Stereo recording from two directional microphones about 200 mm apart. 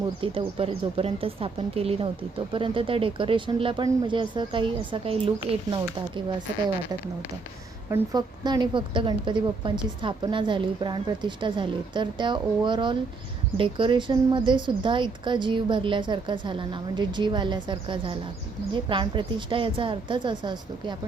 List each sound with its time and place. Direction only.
0.2 s a woman's voice: 25° right (ahead or behind)
7.9 s a woman's voice: 20° right (ahead or behind)